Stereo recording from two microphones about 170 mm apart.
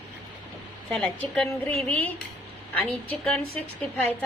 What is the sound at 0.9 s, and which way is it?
Speech, centre (ahead or behind).